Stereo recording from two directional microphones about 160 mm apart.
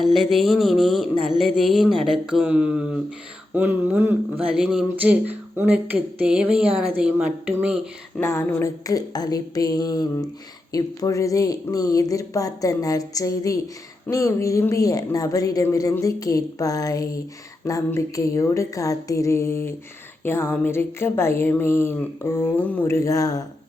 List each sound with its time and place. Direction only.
0.0 s a sound: centre (ahead or behind)
3.5 s speech: 10° right (ahead or behind)
8.2 s speech: 15° left (ahead or behind)